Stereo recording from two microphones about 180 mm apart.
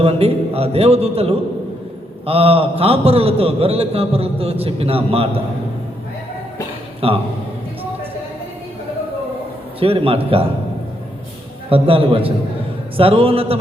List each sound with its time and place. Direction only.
0.0 s a man's voice: 35° right (ahead or behind)
7.0 s a man's voice: 30° right (ahead or behind)
9.8 s a man's voice: 30° right (ahead or behind)
11.7 s a man's voice: 30° right (ahead or behind)